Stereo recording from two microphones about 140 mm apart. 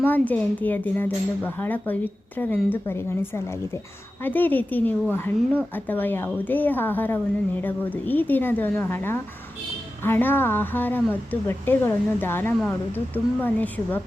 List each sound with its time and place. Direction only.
0.0 s a woman's voice: 10° left (ahead or behind)